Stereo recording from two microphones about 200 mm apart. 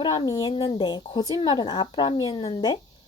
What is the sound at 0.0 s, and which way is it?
A woman's voice, 20° left (ahead or behind).